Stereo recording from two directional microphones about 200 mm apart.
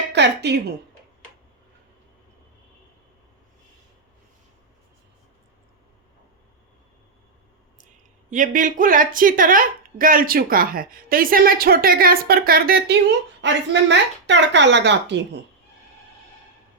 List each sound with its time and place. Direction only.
0.1 s speech: 60° right (ahead or behind)
8.3 s a woman's voice: 40° right (ahead or behind)
13.4 s a woman's voice: 65° right (ahead or behind)